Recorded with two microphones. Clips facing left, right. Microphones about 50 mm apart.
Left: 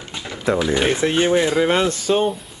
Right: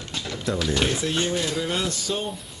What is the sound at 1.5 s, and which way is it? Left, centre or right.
Speech, left.